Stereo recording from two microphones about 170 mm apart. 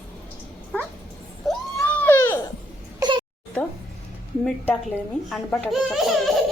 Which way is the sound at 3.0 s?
25° right (ahead or behind).